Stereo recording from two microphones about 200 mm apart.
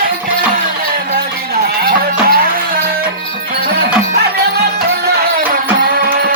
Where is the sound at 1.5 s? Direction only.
50° right (ahead or behind).